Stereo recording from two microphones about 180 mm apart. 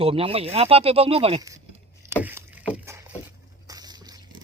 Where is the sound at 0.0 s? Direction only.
30° right (ahead or behind).